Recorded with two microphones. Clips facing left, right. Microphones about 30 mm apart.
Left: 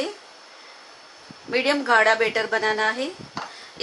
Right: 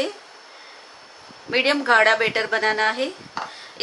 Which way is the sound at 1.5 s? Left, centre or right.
Right.